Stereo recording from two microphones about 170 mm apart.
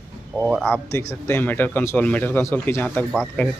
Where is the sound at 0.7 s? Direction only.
15° left (ahead or behind).